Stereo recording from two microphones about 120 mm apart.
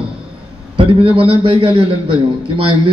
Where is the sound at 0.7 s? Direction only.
50° right (ahead or behind).